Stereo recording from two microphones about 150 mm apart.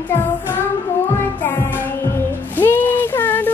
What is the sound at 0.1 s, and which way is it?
Child singing, 15° left (ahead or behind).